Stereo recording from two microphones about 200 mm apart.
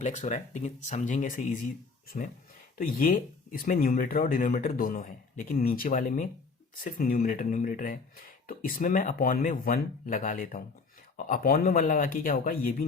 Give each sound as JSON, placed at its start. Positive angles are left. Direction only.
{"t": 0.0, "sound": "speech", "side_deg": 35}